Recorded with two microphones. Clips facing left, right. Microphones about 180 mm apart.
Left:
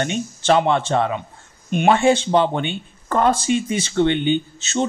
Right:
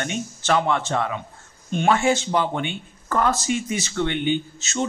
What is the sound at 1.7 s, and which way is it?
Speech, 15° left (ahead or behind).